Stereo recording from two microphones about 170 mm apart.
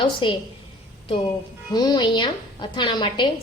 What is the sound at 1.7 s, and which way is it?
A woman's voice, 25° left (ahead or behind).